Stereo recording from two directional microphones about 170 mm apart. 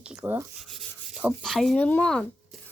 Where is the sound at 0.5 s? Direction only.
Centre (ahead or behind).